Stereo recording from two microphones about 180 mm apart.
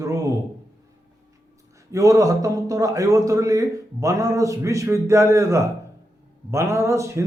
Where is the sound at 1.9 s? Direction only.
20° right (ahead or behind).